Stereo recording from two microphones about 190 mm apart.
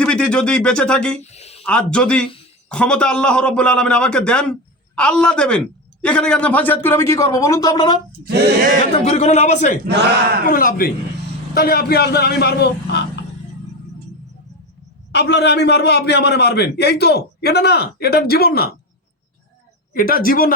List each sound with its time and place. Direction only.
0.0 s speech: 5° left (ahead or behind)
1.2 s speech: 35° left (ahead or behind)
1.6 s a man's voice: 5° left (ahead or behind); by 8.0 s 20° left (ahead or behind)
8.2 s speech: 60° right (ahead or behind)
8.6 s speech: 45° right (ahead or behind)
9.0 s a man's voice: 35° left (ahead or behind)
9.8 s speech: 55° right (ahead or behind)
10.4 s a man's voice: 50° left (ahead or behind)
15.1 s a man's voice: 65° left (ahead or behind)
19.9 s speech: 50° left (ahead or behind)